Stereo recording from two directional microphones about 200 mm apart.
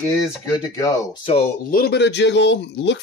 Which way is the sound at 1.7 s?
55° left (ahead or behind).